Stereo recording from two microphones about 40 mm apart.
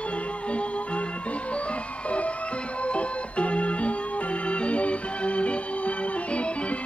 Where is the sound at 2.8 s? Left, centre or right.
Left.